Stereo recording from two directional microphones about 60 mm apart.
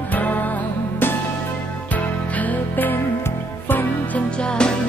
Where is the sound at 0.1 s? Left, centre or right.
Left.